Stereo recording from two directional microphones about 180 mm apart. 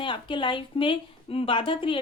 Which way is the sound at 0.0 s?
25° left (ahead or behind).